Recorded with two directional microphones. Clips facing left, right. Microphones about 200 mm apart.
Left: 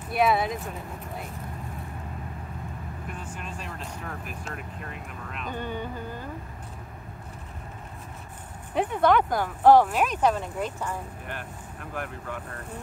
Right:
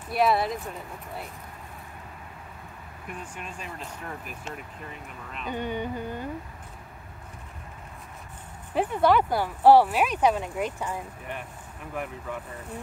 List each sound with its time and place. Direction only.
0.1 s speech: centre (ahead or behind)
3.3 s speech: centre (ahead or behind)
5.5 s speech: 15° right (ahead or behind)
8.7 s speech: 5° right (ahead or behind)
11.2 s speech: centre (ahead or behind)